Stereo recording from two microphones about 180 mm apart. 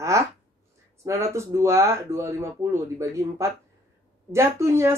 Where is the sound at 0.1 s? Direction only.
15° right (ahead or behind).